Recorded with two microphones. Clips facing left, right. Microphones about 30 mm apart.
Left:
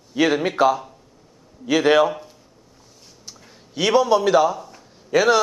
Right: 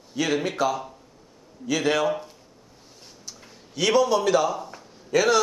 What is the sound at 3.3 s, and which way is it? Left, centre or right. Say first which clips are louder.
Speech: left 1 dB; centre.